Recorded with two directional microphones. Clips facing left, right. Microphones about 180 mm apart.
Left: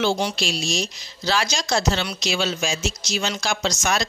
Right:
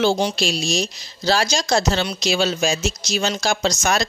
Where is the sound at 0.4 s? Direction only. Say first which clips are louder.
Right 4 dB; 40° right (ahead or behind).